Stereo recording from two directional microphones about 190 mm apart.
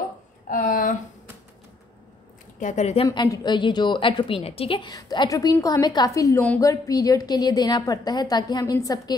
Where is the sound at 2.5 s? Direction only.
40° left (ahead or behind).